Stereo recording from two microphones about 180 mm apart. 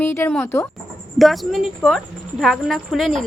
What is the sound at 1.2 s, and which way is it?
A woman's voice, centre (ahead or behind).